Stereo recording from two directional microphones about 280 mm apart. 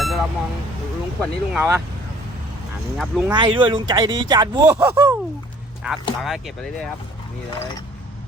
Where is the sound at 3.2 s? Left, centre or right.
Centre.